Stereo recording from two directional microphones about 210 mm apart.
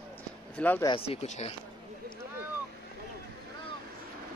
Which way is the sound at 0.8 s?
25° left (ahead or behind).